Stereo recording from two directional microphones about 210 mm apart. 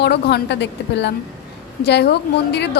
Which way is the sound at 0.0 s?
50° left (ahead or behind).